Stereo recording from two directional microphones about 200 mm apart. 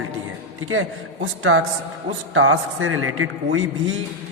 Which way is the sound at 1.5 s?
85° right.